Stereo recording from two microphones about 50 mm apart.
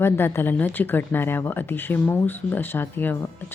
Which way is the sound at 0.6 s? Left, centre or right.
Left.